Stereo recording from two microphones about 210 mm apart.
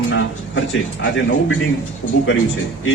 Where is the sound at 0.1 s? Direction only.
60° left (ahead or behind).